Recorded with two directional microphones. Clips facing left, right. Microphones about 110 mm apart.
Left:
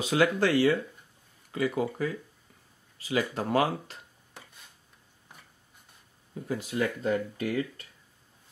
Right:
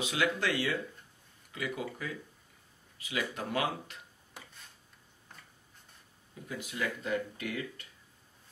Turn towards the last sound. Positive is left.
turn(degrees=35)  # may be behind; listen again after turning